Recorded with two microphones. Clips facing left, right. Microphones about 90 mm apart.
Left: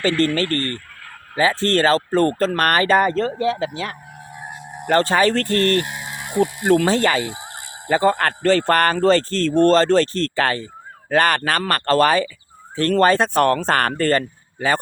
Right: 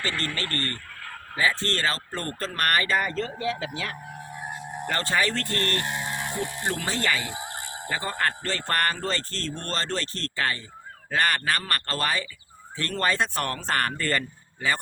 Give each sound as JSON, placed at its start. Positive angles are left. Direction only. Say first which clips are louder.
{"t": 0.1, "sound": "speech", "louder": "left 12 dB", "side_deg": 0}
{"t": 1.4, "sound": "speech", "louder": "left 8 dB", "side_deg": 90}
{"t": 3.0, "sound": "speech", "louder": "left 10 dB", "side_deg": 50}
{"t": 3.3, "sound": "speech", "louder": "left 8 dB", "side_deg": 35}
{"t": 4.3, "sound": "music", "louder": "left 1 dB", "side_deg": 5}
{"t": 4.9, "sound": "speech", "louder": "left 10 dB", "side_deg": 80}
{"t": 5.7, "sound": "a sound", "louder": "left 6 dB", "side_deg": 5}
{"t": 7.0, "sound": "speech", "louder": "left 8 dB", "side_deg": 60}
{"t": 7.3, "sound": "a sound", "louder": "left 2 dB", "side_deg": 20}
{"t": 8.0, "sound": "a man's voice", "louder": "left 11 dB", "side_deg": 75}
{"t": 14.0, "sound": "speech", "louder": "left 9 dB", "side_deg": 60}